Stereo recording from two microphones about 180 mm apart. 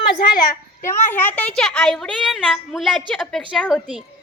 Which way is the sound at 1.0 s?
10° left (ahead or behind).